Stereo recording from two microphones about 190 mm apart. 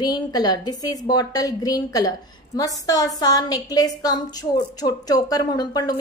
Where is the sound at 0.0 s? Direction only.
20° left (ahead or behind).